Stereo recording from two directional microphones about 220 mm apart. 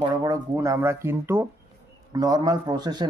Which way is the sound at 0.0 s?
15° right (ahead or behind).